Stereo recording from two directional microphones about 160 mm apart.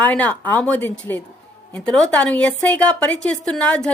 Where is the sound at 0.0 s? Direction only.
10° left (ahead or behind).